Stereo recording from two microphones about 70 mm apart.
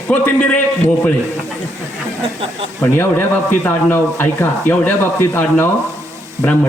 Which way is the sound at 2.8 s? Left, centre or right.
Left.